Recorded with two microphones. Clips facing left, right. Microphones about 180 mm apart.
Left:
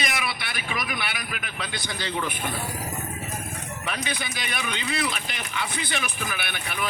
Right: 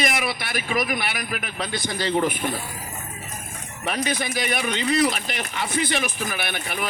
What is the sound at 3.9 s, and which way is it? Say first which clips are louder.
Speech: right 7 dB; 45° right (ahead or behind).